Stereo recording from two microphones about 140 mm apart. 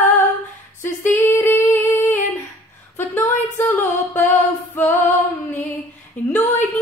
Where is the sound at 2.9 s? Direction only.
15° left (ahead or behind).